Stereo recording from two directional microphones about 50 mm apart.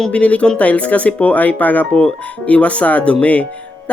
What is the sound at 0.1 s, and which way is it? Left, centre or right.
Speech, left.